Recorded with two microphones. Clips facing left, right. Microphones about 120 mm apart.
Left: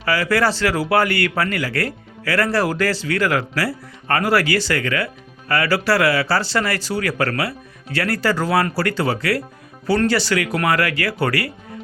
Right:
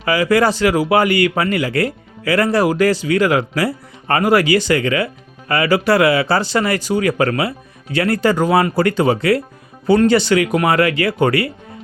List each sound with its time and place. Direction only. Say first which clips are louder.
0.0 s speech: right 4 dB; 20° right (ahead or behind)